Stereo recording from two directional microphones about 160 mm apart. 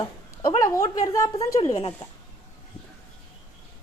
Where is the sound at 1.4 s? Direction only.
45° left (ahead or behind).